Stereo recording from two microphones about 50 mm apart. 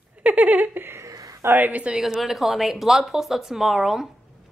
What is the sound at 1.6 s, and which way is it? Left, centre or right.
Speech, right.